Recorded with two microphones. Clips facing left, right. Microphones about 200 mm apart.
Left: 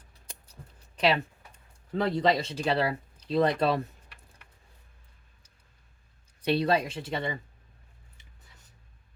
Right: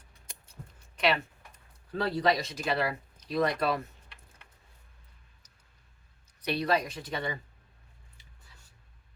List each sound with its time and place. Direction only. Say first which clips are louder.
0.1 s a sound: left 3 dB; 35° left (ahead or behind)
0.9 s speech: left 3 dB; 35° left (ahead or behind)
6.4 s speech: left 3 dB; 25° left (ahead or behind)